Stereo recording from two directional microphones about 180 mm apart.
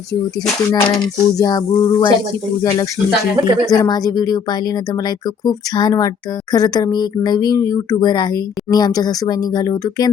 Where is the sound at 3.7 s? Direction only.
20° left (ahead or behind).